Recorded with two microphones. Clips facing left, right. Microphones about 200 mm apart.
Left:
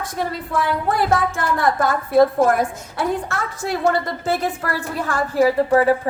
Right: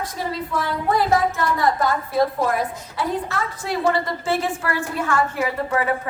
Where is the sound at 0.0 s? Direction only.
50° left (ahead or behind).